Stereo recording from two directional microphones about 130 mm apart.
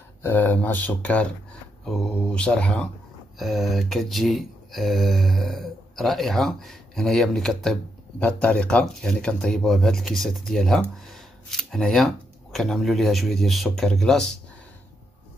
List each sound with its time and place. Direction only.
0.2 s speech: 15° left (ahead or behind)